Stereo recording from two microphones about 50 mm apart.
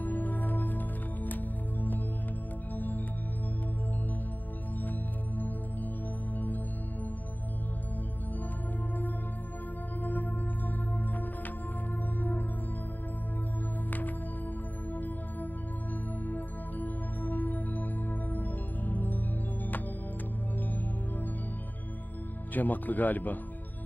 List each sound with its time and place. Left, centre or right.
0.0 s music: left
5.4 s music: left
10.0 s music: left
13.9 s music: left
22.5 s speech: left